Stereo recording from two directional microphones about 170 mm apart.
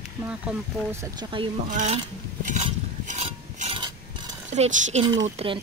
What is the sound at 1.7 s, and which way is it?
Dishes, 45° right (ahead or behind).